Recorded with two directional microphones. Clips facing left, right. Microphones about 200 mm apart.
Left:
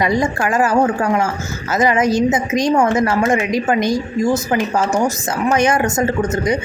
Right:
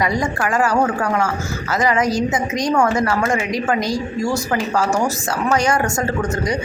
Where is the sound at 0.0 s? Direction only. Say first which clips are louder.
Left 3 dB; 25° left (ahead or behind).